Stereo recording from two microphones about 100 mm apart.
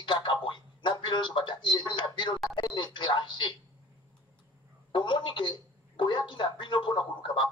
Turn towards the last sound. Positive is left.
turn(degrees=55)  # may be behind; listen again after turning